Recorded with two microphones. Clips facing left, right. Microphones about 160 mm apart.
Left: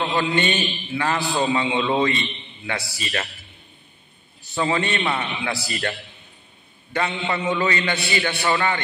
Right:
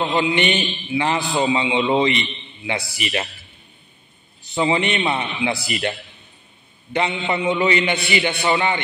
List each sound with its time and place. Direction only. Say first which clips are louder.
0.0 s a man's voice: right 2 dB; 20° right (ahead or behind)
4.5 s a man's voice: right 3 dB; 20° right (ahead or behind)